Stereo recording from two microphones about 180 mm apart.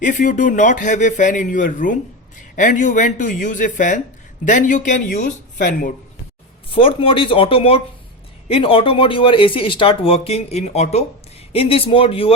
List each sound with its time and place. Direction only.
0.0 s a man's voice: 45° left (ahead or behind)
6.7 s speech: 30° left (ahead or behind)